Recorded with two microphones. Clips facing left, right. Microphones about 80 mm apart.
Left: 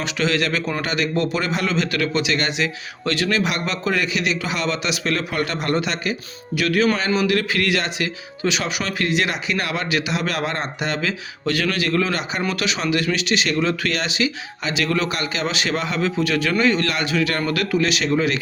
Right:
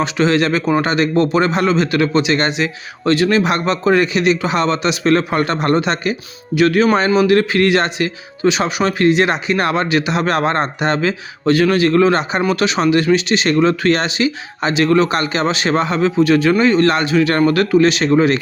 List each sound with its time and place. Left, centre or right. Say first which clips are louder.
0.0 s speech: right 7 dB; right